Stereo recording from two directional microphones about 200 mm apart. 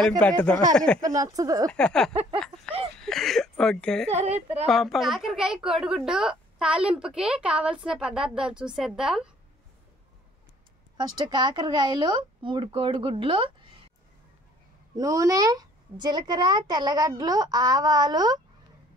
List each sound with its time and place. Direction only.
0.2 s speech: 5° left (ahead or behind)
1.0 s speech: 15° right (ahead or behind)
1.7 s a woman's voice: 5° left (ahead or behind)
4.1 s a woman's voice: 30° right (ahead or behind)
4.6 s a woman's voice: centre (ahead or behind)
11.0 s a woman's voice: 20° right (ahead or behind)
15.0 s a woman's voice: 15° right (ahead or behind)